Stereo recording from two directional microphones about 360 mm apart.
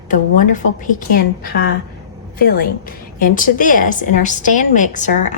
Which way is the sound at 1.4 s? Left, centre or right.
Left.